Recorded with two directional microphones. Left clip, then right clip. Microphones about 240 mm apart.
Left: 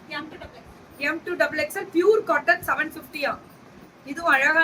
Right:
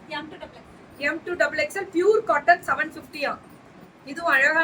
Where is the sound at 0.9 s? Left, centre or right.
Centre.